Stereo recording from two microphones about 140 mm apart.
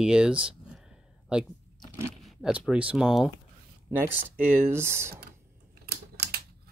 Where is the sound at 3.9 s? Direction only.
15° right (ahead or behind).